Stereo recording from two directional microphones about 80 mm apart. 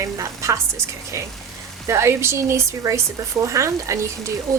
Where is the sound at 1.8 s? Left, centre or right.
Right.